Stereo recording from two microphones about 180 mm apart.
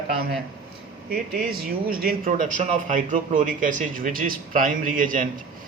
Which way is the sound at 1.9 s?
55° right (ahead or behind).